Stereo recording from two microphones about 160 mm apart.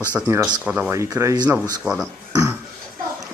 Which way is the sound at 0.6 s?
10° right (ahead or behind).